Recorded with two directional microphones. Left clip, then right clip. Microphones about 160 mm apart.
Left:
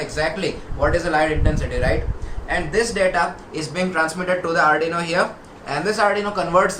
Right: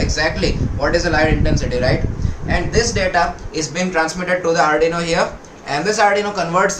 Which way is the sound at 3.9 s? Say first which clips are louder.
Right 3 dB; 20° right (ahead or behind).